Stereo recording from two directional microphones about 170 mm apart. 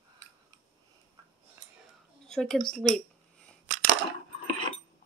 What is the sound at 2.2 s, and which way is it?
Speech, 5° left (ahead or behind).